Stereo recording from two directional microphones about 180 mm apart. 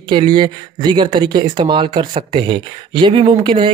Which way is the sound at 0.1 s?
25° right (ahead or behind).